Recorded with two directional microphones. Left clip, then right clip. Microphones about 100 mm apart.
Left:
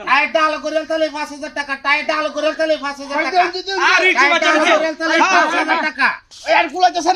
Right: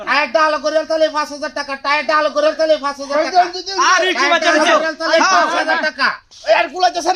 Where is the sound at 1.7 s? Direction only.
30° right (ahead or behind).